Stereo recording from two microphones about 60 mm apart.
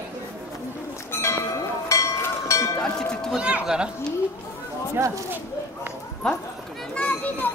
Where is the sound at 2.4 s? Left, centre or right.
Left.